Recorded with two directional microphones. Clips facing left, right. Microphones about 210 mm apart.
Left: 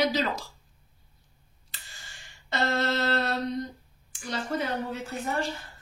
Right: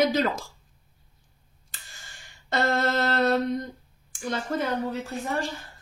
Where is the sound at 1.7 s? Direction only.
50° right (ahead or behind).